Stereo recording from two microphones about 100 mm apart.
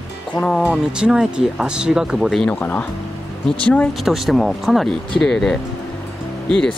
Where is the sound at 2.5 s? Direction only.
20° left (ahead or behind).